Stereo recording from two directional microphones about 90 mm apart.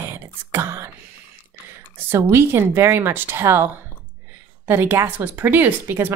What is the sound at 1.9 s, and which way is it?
Speech, 25° right (ahead or behind).